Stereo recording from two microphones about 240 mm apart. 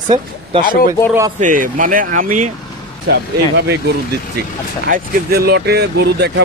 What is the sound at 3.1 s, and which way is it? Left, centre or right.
Speech, right.